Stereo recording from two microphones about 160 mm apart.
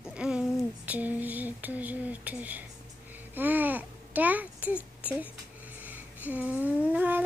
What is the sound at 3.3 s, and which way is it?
Babbling, 10° right (ahead or behind).